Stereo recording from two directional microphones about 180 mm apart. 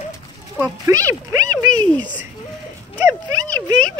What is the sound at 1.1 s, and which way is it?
Speech, 15° right (ahead or behind).